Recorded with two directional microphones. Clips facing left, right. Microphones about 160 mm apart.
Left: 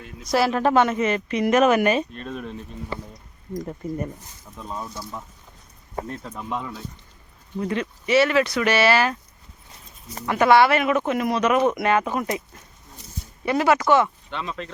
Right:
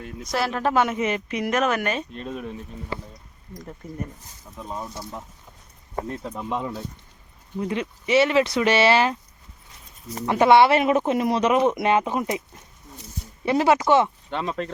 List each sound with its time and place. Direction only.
0.3 s speech: 5° left (ahead or behind); by 1.5 s 10° right (ahead or behind)
1.5 s speech: 5° left (ahead or behind)
2.1 s speech: 15° right (ahead or behind)
6.3 s speech: 20° right (ahead or behind)
10.2 s speech: 25° right (ahead or behind)
13.4 s speech: 25° right (ahead or behind)
14.3 s speech: 45° right (ahead or behind)